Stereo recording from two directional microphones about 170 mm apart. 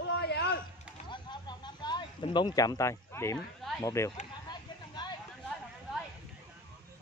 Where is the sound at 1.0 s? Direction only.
25° left (ahead or behind).